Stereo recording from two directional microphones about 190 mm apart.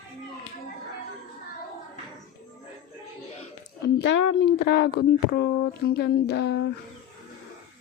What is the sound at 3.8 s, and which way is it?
Speech, 65° left (ahead or behind).